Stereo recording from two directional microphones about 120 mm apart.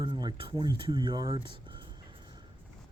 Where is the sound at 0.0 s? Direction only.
40° right (ahead or behind).